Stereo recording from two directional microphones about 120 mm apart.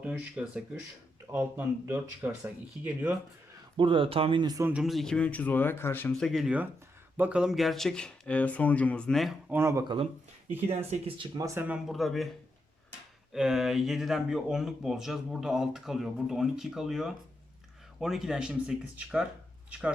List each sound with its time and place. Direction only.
0.0 s speech: 10° right (ahead or behind)
3.8 s speech: 45° right (ahead or behind)
4.7 s speech: 5° right (ahead or behind); by 6.1 s 20° left (ahead or behind)
6.1 s speech: 5° left (ahead or behind)
7.2 s speech: 10° right (ahead or behind)
9.5 s speech: 20° right (ahead or behind)
11.3 s speech: 25° right (ahead or behind)
11.9 s speech: centre (ahead or behind)
13.3 s speech: 5° right (ahead or behind)